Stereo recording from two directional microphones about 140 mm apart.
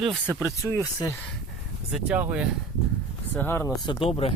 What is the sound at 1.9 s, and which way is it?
Speech, 10° right (ahead or behind).